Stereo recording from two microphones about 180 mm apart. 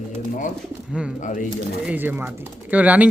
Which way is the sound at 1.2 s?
45° left (ahead or behind).